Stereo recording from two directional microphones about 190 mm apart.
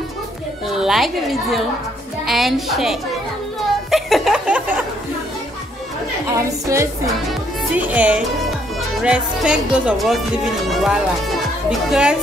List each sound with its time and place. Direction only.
0.7 s speech: centre (ahead or behind)
3.9 s a sound: centre (ahead or behind)
6.3 s speech: 15° right (ahead or behind)